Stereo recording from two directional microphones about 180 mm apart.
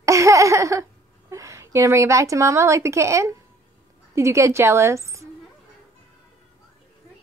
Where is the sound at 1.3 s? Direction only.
15° right (ahead or behind).